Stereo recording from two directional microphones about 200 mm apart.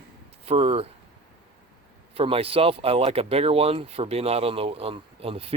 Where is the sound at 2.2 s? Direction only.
30° right (ahead or behind).